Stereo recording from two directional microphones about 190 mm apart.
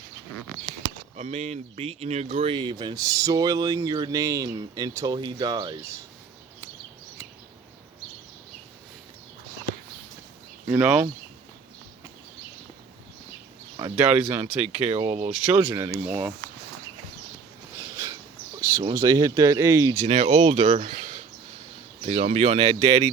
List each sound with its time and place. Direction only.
1.1 s speech: 35° right (ahead or behind); by 6.0 s 20° right (ahead or behind)
10.7 s speech: 5° right (ahead or behind)
13.7 s speech: 30° right (ahead or behind)
15.5 s speech: 15° right (ahead or behind)
17.7 s a sound: 15° right (ahead or behind)
18.8 s speech: 20° right (ahead or behind)
20.1 s speech: 40° right (ahead or behind)